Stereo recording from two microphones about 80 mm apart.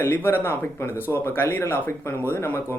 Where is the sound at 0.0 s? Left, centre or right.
Left.